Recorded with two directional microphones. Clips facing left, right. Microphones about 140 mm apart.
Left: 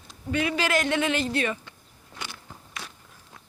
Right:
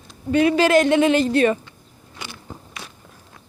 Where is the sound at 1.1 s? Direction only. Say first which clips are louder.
Right 10 dB; 45° right (ahead or behind).